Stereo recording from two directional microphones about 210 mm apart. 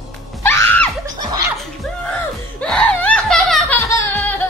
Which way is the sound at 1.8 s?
5° left (ahead or behind).